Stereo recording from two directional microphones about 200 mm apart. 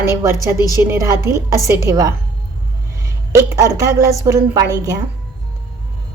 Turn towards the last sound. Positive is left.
turn(degrees=-15)  # may be behind; listen again after turning